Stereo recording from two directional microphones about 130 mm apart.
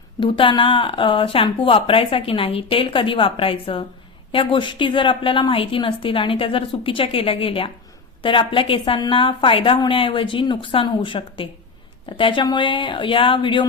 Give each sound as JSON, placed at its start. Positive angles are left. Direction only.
{"t": 0.2, "sound": "a woman's voice", "side_deg": 40}